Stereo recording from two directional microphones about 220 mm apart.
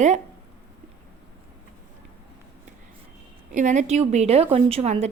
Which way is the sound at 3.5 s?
35° right (ahead or behind).